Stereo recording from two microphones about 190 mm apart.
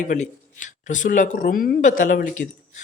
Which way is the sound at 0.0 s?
40° left (ahead or behind).